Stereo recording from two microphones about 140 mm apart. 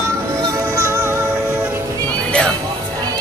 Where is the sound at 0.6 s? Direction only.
20° right (ahead or behind).